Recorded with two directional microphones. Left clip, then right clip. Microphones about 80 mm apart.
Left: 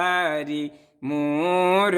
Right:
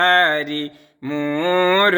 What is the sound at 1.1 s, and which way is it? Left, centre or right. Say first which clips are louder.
Speech: right 3 dB; centre.